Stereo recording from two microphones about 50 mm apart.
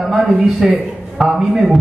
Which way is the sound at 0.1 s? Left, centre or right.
Centre.